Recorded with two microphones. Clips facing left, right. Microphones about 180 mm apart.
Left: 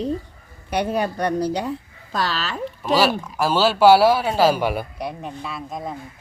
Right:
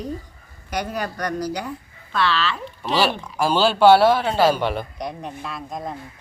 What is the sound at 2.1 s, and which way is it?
Speech, 40° left (ahead or behind).